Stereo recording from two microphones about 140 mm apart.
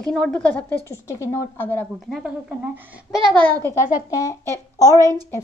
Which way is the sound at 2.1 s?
10° right (ahead or behind).